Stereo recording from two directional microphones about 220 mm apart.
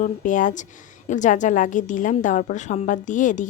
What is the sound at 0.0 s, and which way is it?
A woman's voice, 35° left (ahead or behind).